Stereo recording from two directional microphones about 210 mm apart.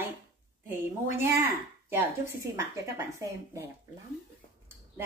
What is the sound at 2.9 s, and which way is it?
Speech, 15° right (ahead or behind).